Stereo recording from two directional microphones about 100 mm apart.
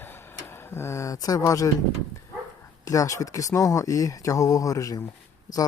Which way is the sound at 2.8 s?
35° left (ahead or behind).